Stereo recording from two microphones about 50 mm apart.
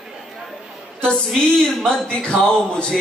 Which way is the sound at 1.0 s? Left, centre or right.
Centre.